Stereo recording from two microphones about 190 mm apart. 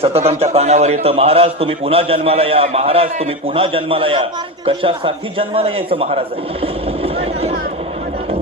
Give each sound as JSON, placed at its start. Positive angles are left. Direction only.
{"t": 0.0, "sound": "a man's voice", "side_deg": -30}